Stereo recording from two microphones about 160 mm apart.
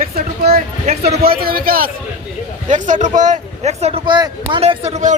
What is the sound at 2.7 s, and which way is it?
Speech, 50° right (ahead or behind).